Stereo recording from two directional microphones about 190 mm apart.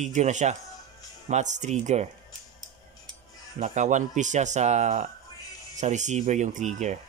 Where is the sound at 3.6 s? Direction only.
40° right (ahead or behind).